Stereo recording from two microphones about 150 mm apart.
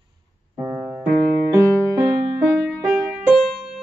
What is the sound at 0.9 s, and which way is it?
Keyboard, centre (ahead or behind).